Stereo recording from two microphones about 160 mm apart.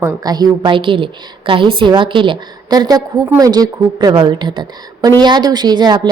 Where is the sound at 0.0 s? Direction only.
25° right (ahead or behind).